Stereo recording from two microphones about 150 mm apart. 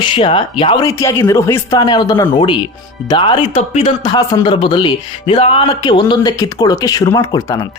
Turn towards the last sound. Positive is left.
turn(degrees=20)  # may be behind; listen again after turning